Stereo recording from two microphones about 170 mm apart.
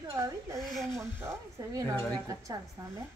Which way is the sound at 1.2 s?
15° right (ahead or behind).